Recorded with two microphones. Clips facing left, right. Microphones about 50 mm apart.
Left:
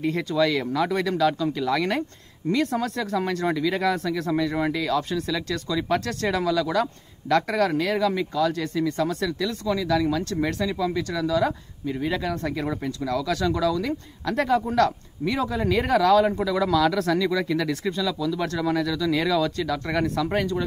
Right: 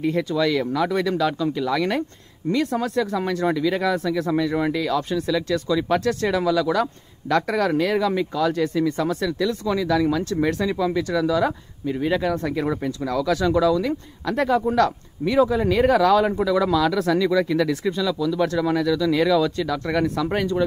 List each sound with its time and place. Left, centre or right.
0.1 s speech: centre
13.0 s speech: right
13.8 s speech: centre